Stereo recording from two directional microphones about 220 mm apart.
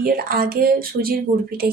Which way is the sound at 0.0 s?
45° right (ahead or behind).